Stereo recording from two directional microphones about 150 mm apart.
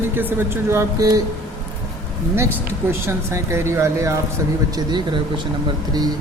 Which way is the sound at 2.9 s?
15° right (ahead or behind).